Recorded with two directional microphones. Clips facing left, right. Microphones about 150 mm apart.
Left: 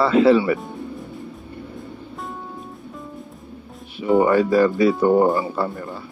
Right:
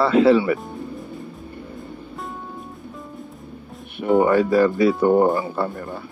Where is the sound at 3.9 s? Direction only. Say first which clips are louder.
Even; 55° right (ahead or behind).